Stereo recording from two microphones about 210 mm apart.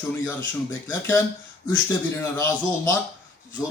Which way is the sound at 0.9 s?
10° left (ahead or behind).